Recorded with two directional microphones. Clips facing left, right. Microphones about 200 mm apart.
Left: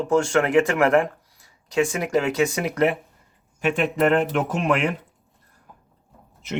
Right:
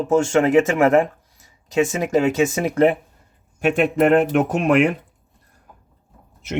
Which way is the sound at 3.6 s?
50° right (ahead or behind).